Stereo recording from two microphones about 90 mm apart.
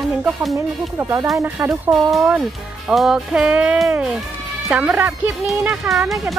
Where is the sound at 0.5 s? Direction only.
35° right (ahead or behind).